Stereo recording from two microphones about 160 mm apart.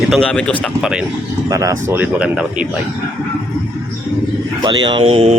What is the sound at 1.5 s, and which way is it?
Speech, 20° right (ahead or behind).